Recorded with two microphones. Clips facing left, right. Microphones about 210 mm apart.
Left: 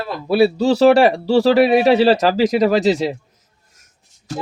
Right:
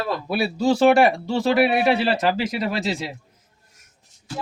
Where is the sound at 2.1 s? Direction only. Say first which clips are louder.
Left 8 dB; 90° left.